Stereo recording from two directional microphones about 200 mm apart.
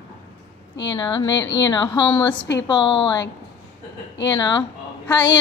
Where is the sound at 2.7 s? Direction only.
25° left (ahead or behind).